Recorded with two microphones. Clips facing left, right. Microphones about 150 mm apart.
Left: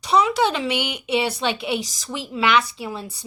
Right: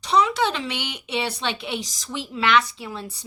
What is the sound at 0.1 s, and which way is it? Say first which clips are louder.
A woman's voice: left 2 dB; 10° left (ahead or behind).